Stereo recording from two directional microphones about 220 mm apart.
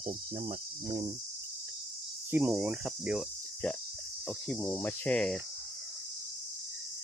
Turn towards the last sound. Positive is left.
turn(degrees=5)  # may be behind; listen again after turning